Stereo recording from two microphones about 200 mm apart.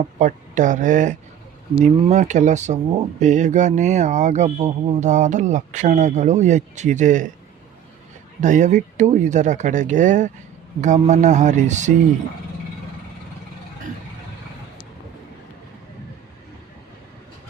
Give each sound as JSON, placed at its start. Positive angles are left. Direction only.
{"t": 0.2, "sound": "speech", "side_deg": -40}
{"t": 8.4, "sound": "speech", "side_deg": -40}